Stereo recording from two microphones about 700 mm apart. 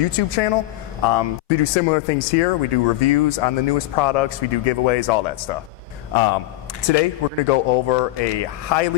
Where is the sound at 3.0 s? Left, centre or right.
Left.